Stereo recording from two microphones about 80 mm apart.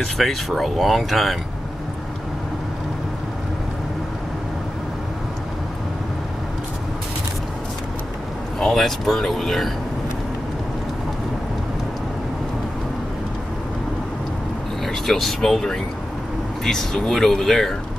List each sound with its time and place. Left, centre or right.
0.0 s speech: centre
8.5 s speech: centre
14.9 s speech: centre